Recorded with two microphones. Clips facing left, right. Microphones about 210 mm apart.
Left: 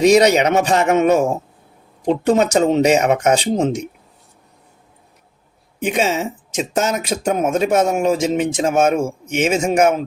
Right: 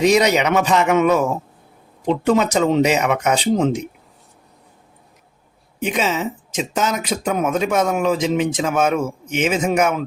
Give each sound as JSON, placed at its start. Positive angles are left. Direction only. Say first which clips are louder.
{"t": 0.0, "sound": "speech", "louder": "left 3 dB", "side_deg": 40}
{"t": 6.0, "sound": "speech", "louder": "left 2 dB", "side_deg": 45}